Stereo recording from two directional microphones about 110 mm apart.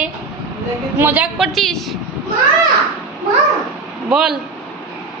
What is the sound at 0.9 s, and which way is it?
Speech, 15° right (ahead or behind).